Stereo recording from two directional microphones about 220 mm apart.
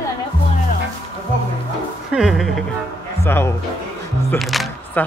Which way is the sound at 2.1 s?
Centre (ahead or behind).